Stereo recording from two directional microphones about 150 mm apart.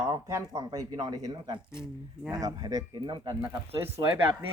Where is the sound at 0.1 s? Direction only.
20° right (ahead or behind).